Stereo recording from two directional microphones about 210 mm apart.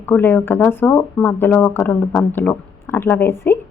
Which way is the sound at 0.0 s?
10° left (ahead or behind).